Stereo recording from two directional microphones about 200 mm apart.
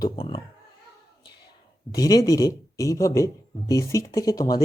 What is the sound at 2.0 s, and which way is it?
Speech, 20° left (ahead or behind).